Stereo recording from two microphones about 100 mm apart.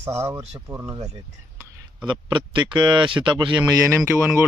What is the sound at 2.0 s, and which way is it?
Speech, 50° right (ahead or behind).